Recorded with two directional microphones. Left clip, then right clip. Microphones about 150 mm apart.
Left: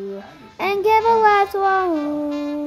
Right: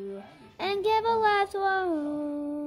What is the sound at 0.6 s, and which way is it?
Child singing, 10° right (ahead or behind).